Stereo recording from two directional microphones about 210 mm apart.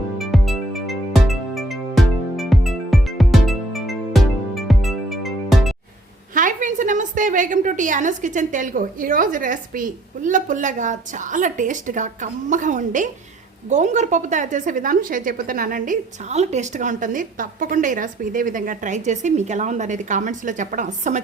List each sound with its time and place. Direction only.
0.2 s music: centre (ahead or behind)
6.3 s a woman's voice: 40° right (ahead or behind)